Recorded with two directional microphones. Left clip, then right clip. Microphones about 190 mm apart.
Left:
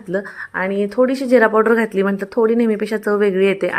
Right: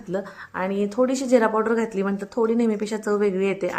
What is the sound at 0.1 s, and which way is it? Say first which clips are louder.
Speech: left 6 dB; 20° left (ahead or behind).